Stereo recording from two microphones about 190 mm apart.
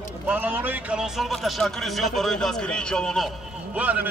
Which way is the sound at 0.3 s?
10° right (ahead or behind).